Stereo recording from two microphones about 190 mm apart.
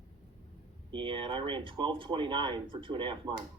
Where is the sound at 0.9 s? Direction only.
25° right (ahead or behind).